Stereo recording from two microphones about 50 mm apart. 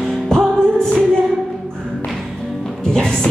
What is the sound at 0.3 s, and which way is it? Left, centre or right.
Music, centre.